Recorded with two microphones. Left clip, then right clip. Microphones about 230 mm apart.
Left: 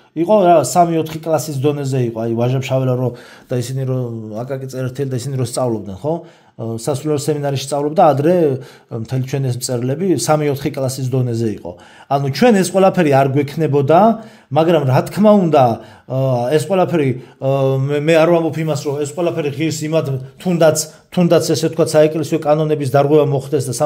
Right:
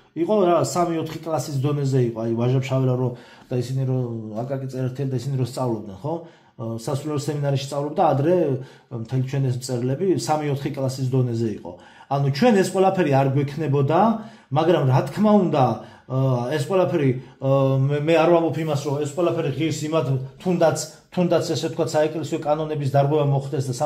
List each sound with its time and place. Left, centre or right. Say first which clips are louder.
0.1 s a man's voice: left 8 dB; left